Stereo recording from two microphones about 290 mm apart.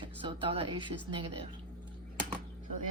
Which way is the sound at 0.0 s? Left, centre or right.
Centre.